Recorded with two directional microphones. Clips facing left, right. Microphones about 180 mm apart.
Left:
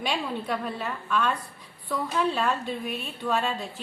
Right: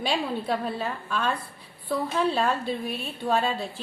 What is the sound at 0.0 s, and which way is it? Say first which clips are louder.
A woman's voice: right 2 dB; 30° right (ahead or behind).